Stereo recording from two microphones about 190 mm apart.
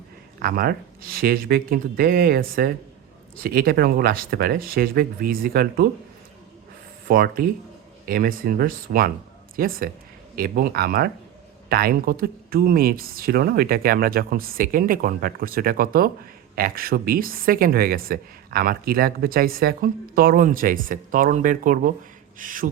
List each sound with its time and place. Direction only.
0.3 s speech: 50° right (ahead or behind)
7.1 s speech: 50° right (ahead or behind)